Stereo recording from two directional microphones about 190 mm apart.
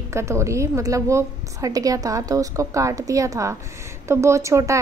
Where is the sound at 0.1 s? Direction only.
15° right (ahead or behind).